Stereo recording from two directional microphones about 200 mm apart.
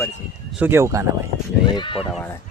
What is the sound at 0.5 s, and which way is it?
Speech, 10° right (ahead or behind).